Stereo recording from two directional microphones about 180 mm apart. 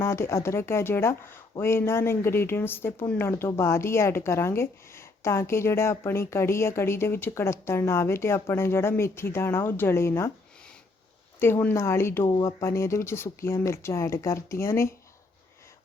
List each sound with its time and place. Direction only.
0.0 s speech: 15° left (ahead or behind)
11.3 s speech: 15° left (ahead or behind)